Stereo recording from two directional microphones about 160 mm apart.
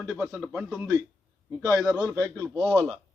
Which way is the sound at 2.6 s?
5° left (ahead or behind).